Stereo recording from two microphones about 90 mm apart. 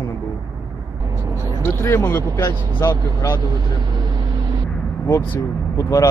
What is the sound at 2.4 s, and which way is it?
Speech, 40° left (ahead or behind).